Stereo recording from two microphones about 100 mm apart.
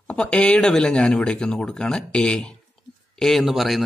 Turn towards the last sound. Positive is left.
turn(degrees=0)  # may be behind; listen again after turning